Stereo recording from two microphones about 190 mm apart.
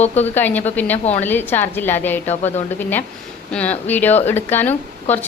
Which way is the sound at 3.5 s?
5° left (ahead or behind).